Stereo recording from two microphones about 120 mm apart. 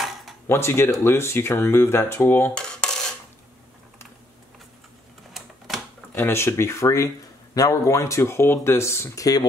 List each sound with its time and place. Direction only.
0.0 s a sound: centre (ahead or behind)
0.5 s speech: 20° left (ahead or behind)
2.5 s filing: 5° left (ahead or behind)
6.1 s speech: 20° left (ahead or behind)